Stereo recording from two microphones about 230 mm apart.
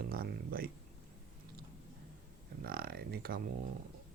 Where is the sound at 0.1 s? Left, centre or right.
Right.